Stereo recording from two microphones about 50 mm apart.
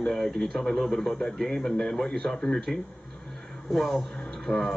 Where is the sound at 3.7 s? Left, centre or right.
Centre.